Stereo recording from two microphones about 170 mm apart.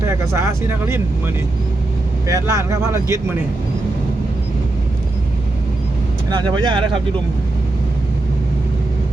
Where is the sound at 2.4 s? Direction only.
15° right (ahead or behind).